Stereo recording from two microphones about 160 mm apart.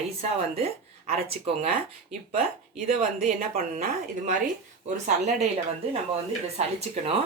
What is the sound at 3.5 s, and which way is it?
Speech, 55° right (ahead or behind).